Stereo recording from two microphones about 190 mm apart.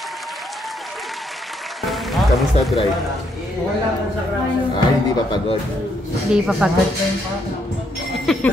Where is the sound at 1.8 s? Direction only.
Centre (ahead or behind).